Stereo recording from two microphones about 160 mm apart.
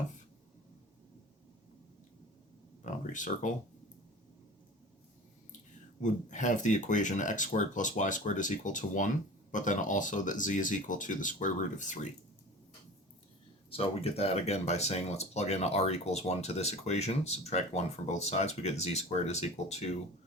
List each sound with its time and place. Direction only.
2.8 s a sound: 50° left (ahead or behind)
6.0 s speech: 50° left (ahead or behind)
13.7 s speech: 35° left (ahead or behind)